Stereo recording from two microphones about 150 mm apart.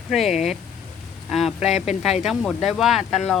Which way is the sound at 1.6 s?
45° left (ahead or behind).